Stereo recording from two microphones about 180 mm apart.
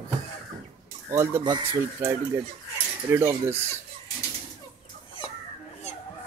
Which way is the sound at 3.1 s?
15° right (ahead or behind).